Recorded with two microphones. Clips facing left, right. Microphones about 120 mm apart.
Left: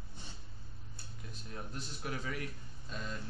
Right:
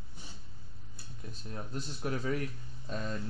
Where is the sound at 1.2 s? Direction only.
35° right (ahead or behind).